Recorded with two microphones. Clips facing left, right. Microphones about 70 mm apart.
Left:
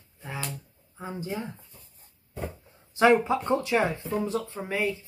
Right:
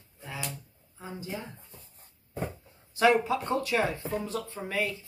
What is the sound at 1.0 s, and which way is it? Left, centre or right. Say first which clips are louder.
Speech: left 5 dB; left.